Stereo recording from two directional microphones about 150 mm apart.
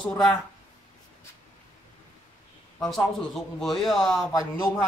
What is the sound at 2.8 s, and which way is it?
Speech, centre (ahead or behind).